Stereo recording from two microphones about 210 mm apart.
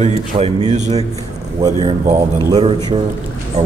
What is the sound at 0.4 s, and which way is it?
Speech, 30° right (ahead or behind).